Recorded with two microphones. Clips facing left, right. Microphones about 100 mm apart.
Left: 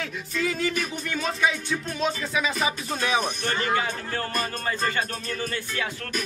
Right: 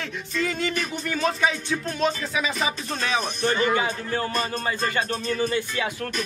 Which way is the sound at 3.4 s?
15° right (ahead or behind).